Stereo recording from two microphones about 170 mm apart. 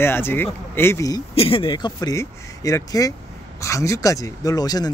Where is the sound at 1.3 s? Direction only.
35° left (ahead or behind).